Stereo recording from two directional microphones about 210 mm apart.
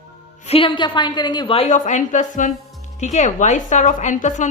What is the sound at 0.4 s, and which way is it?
A man's voice, 25° left (ahead or behind).